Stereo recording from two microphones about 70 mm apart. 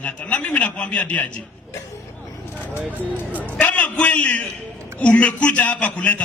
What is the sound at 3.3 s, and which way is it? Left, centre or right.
A man's voice, left.